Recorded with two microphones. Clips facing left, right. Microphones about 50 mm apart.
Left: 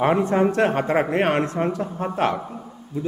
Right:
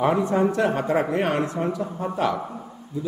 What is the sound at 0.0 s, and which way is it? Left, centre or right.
Speech, left.